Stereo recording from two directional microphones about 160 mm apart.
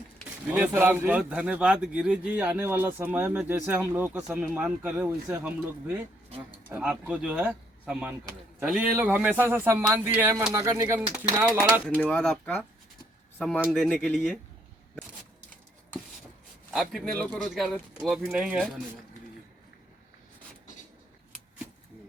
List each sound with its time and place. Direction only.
0.5 s a man's voice: 15° right (ahead or behind)
6.7 s a man's voice: 10° right (ahead or behind)
11.5 s speech: 5° left (ahead or behind)
13.7 s speech: 5° left (ahead or behind)
16.7 s speech: centre (ahead or behind)